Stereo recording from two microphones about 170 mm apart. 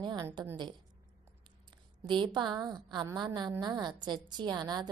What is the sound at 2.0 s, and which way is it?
A woman's voice, 30° right (ahead or behind).